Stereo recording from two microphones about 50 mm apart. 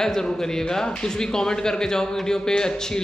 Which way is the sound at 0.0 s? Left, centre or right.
Centre.